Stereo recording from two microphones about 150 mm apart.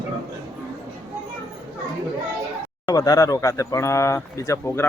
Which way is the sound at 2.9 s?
25° left (ahead or behind).